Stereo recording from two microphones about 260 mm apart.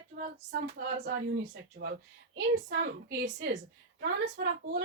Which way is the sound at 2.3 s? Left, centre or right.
Right.